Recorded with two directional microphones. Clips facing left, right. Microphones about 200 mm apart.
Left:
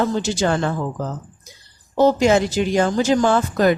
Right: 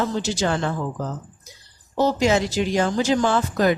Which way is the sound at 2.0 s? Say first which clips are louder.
Left 4 dB; 50° left (ahead or behind).